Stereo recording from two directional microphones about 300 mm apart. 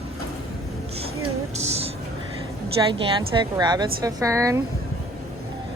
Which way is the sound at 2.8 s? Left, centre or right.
Centre.